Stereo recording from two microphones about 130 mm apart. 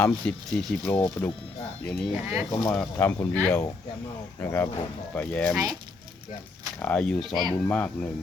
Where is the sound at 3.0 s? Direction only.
20° left (ahead or behind).